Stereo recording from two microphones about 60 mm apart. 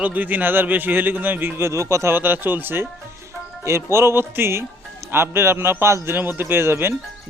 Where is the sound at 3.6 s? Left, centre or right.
Right.